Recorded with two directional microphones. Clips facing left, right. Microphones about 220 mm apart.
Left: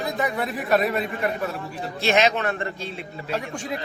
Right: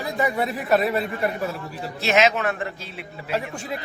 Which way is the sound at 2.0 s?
5° right (ahead or behind).